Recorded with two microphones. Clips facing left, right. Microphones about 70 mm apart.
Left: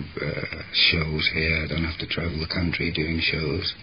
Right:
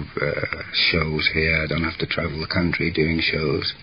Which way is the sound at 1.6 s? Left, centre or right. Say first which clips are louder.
Right 5 dB; right.